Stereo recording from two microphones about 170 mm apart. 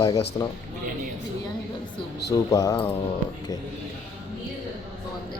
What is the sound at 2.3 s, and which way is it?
Mantra, 20° left (ahead or behind).